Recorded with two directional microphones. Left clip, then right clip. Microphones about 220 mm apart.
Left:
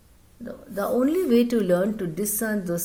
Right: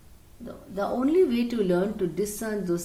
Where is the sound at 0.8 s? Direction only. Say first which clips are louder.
Even; 45° left (ahead or behind).